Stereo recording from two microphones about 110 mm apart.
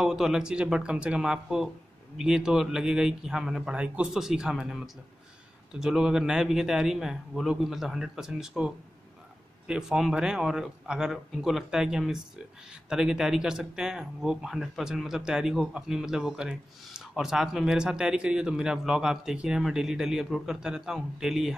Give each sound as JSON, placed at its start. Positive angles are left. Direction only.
{"t": 0.0, "sound": "speech", "side_deg": -5}